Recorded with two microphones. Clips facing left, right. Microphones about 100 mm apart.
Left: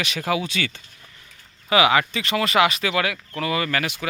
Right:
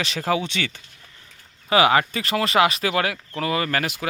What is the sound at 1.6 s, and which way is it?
Speech, 35° right (ahead or behind).